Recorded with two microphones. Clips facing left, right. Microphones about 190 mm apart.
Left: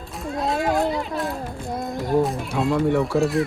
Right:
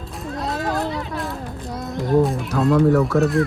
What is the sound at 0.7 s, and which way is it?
Children playing, 20° left (ahead or behind).